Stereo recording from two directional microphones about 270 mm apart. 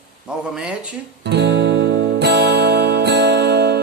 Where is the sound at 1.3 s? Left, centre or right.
Right.